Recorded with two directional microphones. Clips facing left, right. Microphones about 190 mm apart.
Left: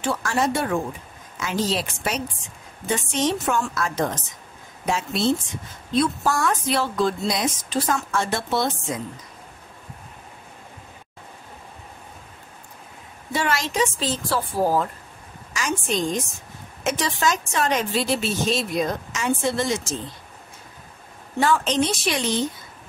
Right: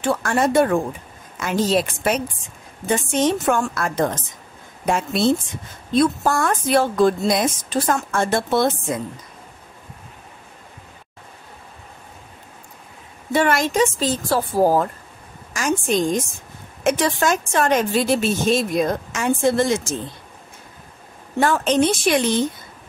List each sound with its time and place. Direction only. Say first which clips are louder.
0.0 s a woman's voice: right 4 dB; 55° right (ahead or behind)
13.3 s a woman's voice: right 6 dB; 55° right (ahead or behind)
21.4 s a woman's voice: right 3 dB; 50° right (ahead or behind)